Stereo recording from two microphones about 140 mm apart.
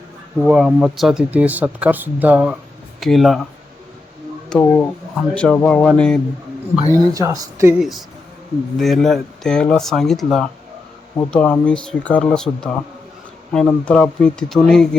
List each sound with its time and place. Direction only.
0.3 s speech: 5° right (ahead or behind)
3.0 s speech: centre (ahead or behind)
4.6 s speech: 15° left (ahead or behind)
7.0 s speech: 25° right (ahead or behind)
7.8 s speech: centre (ahead or behind)